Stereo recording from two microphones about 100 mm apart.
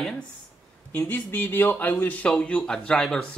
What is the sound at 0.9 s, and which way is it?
Speech, 15° left (ahead or behind).